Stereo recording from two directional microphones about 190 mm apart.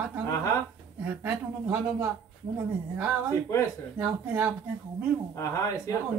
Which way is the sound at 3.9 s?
10° right (ahead or behind).